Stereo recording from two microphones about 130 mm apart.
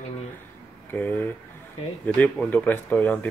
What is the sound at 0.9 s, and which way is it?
Speech, 15° left (ahead or behind).